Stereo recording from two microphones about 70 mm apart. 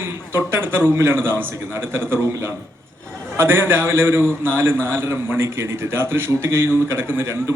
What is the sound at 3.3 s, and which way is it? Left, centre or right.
A man's voice, right.